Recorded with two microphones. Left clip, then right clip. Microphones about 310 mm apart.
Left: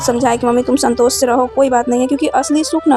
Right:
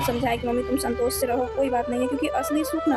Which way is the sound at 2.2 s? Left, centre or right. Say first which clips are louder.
Left 10 dB; left.